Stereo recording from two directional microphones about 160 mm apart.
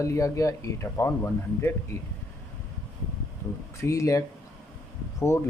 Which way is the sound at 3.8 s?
20° left (ahead or behind).